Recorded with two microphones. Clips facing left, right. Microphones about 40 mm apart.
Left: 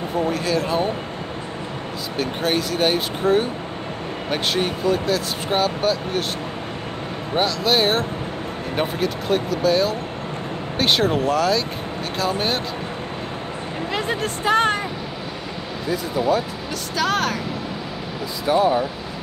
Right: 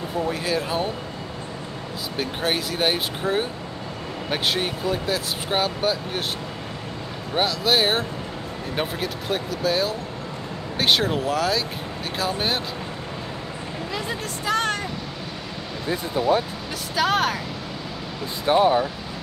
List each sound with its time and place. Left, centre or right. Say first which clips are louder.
0.3 s speech: left 2 dB; centre
2.1 s speech: left 3 dB; centre
7.3 s speech: left 2 dB; centre
13.9 s speech: left 6 dB; left
16.9 s speech: even; centre
18.5 s speech: even; right